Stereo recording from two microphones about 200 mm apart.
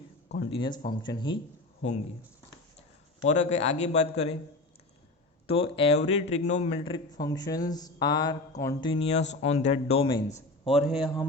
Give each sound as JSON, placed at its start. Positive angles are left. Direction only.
{"t": 0.5, "sound": "a man's voice", "side_deg": 25}
{"t": 3.2, "sound": "a man's voice", "side_deg": 35}
{"t": 5.5, "sound": "a man's voice", "side_deg": 30}
{"t": 10.7, "sound": "speech", "side_deg": 0}